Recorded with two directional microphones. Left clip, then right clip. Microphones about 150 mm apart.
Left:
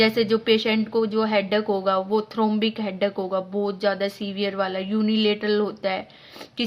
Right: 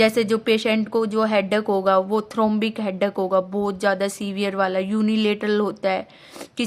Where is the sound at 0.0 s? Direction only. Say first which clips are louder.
Right 1 dB; 40° right (ahead or behind).